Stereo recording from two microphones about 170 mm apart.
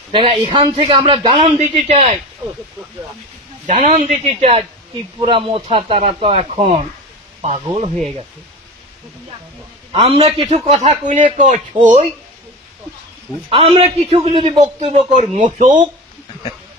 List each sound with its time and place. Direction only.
0.1 s a man's voice: 30° right (ahead or behind)
3.7 s a man's voice: 40° right (ahead or behind)
9.9 s a man's voice: 35° right (ahead or behind)
13.5 s a man's voice: 35° right (ahead or behind)
15.1 s speech: 45° right (ahead or behind)